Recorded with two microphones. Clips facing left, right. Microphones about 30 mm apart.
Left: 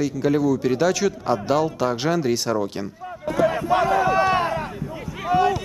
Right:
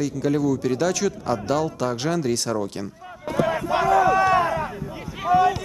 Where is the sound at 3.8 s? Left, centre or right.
Left.